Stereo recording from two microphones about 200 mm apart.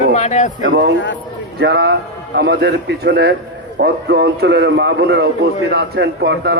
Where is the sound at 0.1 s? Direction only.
35° left (ahead or behind).